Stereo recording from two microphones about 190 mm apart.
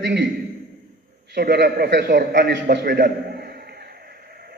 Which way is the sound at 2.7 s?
60° right (ahead or behind).